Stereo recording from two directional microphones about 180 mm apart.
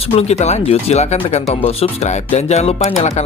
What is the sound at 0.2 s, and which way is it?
Speech, 35° left (ahead or behind).